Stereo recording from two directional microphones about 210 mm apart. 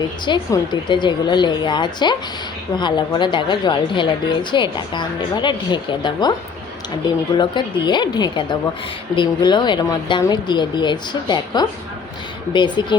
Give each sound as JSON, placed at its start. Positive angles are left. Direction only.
{"t": 0.3, "sound": "a woman's voice", "side_deg": 20}
{"t": 7.3, "sound": "a woman's voice", "side_deg": 20}